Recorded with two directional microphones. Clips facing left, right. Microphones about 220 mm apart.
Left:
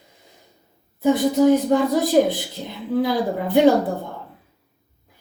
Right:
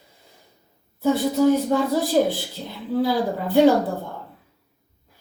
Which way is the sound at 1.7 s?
20° left (ahead or behind).